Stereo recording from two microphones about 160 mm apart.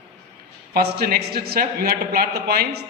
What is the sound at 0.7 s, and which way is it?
A man's voice, 80° right.